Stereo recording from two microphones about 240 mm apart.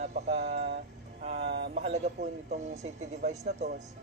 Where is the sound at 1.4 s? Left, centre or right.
Right.